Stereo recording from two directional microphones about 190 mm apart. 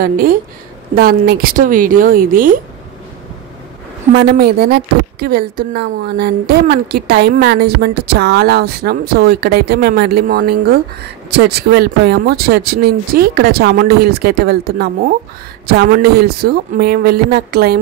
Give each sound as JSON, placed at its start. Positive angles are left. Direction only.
{"t": 0.0, "sound": "speech", "side_deg": -50}
{"t": 4.1, "sound": "a woman's voice", "side_deg": -55}